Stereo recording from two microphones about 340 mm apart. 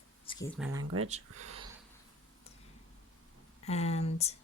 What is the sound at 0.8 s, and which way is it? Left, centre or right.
Speech, right.